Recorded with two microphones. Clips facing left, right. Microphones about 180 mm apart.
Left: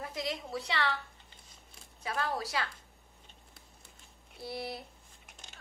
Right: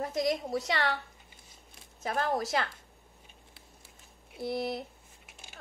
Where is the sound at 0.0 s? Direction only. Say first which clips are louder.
Right 8 dB; 45° right (ahead or behind).